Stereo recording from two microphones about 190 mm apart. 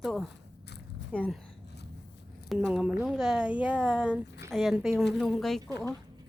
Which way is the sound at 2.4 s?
5° right (ahead or behind).